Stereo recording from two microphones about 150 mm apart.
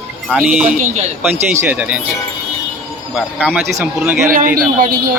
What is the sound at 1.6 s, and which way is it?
Speech, 10° right (ahead or behind).